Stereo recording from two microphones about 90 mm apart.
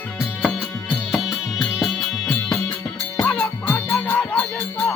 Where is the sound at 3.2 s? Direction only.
10° left (ahead or behind).